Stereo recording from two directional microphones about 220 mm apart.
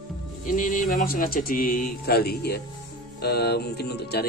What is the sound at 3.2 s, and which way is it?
Music, 50° left (ahead or behind).